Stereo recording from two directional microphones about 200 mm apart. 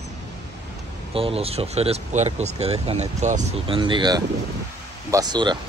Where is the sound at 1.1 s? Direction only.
30° right (ahead or behind).